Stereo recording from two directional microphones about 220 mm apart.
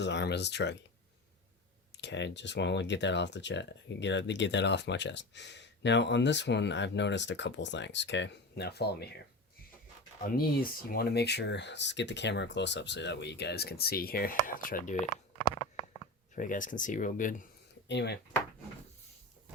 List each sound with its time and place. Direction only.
0.0 s speech: 50° left (ahead or behind)
2.0 s speech: 55° left (ahead or behind)
10.2 s speech: 40° left (ahead or behind)
15.7 s a sound: 20° left (ahead or behind)
16.3 s speech: 35° left (ahead or behind)
17.8 s speech: 50° left (ahead or behind)